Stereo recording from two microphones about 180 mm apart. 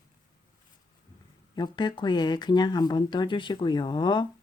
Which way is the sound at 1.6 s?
25° left (ahead or behind).